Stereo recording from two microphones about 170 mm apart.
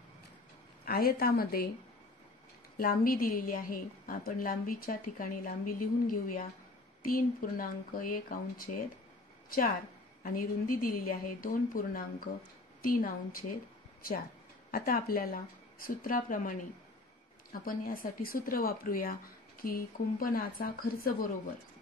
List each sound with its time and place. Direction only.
0.8 s speech: 60° left (ahead or behind)
2.8 s speech: 55° left (ahead or behind)
10.2 s speech: 55° left (ahead or behind)
14.7 s speech: 60° left (ahead or behind)